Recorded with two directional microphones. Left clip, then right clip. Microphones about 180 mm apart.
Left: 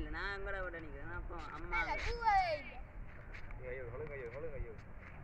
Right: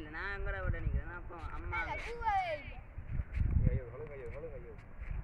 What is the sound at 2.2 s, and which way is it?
Speech, 5° left (ahead or behind).